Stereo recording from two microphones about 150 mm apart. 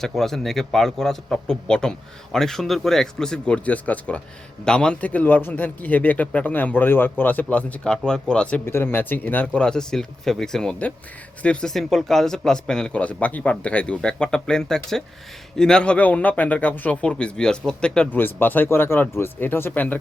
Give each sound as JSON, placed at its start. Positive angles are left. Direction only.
{"t": 0.0, "sound": "a man's voice", "side_deg": 0}